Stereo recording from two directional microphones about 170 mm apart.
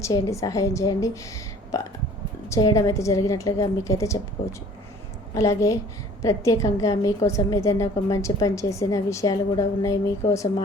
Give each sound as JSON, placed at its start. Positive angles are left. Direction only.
{"t": 0.0, "sound": "a woman's voice", "side_deg": 20}
{"t": 5.3, "sound": "a woman's voice", "side_deg": 20}